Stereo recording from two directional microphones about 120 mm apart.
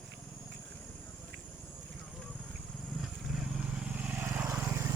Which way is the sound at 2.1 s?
Centre (ahead or behind).